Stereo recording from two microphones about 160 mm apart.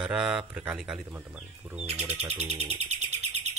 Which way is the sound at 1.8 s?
40° right (ahead or behind).